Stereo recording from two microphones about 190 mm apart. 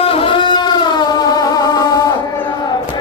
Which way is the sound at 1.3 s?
20° left (ahead or behind).